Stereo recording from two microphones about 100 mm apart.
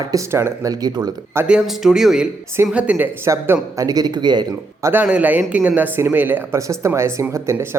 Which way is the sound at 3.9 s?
40° right (ahead or behind).